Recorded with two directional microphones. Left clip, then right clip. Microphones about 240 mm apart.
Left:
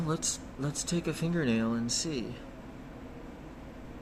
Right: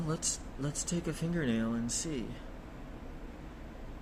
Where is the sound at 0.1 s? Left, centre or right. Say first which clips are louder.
Left 3 dB; centre.